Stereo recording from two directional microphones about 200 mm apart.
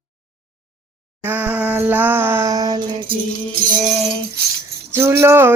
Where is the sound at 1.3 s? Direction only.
10° right (ahead or behind).